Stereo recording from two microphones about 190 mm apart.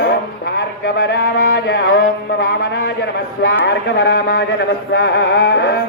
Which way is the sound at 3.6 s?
70° left (ahead or behind).